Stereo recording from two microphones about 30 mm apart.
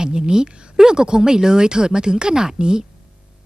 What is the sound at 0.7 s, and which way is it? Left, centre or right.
A woman's voice, right.